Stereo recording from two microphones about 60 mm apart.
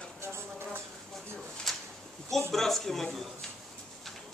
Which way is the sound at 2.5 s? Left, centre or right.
Centre.